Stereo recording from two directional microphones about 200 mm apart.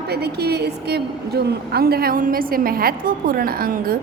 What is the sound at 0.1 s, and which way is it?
A woman's voice, 55° right (ahead or behind).